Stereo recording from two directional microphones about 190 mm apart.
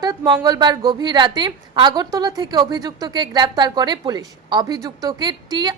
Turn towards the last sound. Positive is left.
turn(degrees=-20)  # may be behind; listen again after turning